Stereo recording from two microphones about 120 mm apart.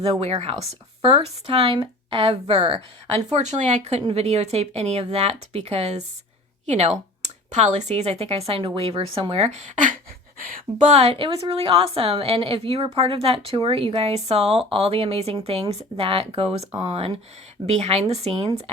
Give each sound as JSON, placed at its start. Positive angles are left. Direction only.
{"t": 0.0, "sound": "a woman's voice", "side_deg": -60}
{"t": 3.3, "sound": "speech", "side_deg": -75}
{"t": 4.1, "sound": "a woman's voice", "side_deg": -60}
{"t": 7.5, "sound": "a woman's voice", "side_deg": -75}